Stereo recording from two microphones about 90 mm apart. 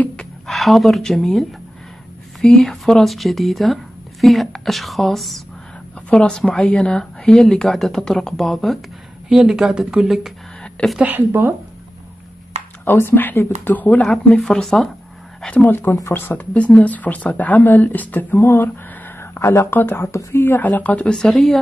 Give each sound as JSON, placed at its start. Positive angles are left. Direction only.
{"t": 0.0, "sound": "a sound", "side_deg": 10}
{"t": 2.4, "sound": "a woman's voice", "side_deg": 5}
{"t": 10.6, "sound": "a sound", "side_deg": 5}
{"t": 11.0, "sound": "speech", "side_deg": -20}
{"t": 12.8, "sound": "speech", "side_deg": 25}
{"t": 14.0, "sound": "a woman's voice", "side_deg": 5}
{"t": 15.4, "sound": "speech", "side_deg": 15}
{"t": 20.4, "sound": "a woman's voice", "side_deg": 20}